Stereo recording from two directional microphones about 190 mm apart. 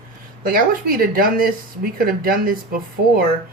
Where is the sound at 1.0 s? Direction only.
50° right (ahead or behind).